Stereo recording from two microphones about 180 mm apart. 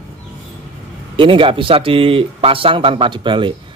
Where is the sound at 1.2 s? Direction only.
30° right (ahead or behind).